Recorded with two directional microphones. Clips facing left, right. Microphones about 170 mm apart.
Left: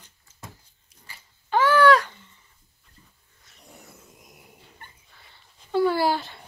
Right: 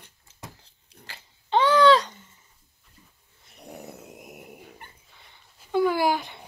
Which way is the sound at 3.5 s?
65° right (ahead or behind).